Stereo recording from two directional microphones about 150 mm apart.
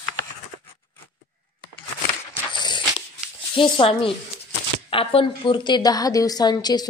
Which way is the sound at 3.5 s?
35° left (ahead or behind).